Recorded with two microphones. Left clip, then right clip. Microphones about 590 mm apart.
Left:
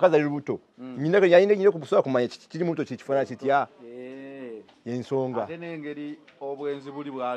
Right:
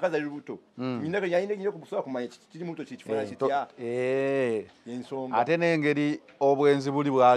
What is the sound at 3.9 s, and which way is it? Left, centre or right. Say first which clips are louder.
Speech: right 14 dB; right.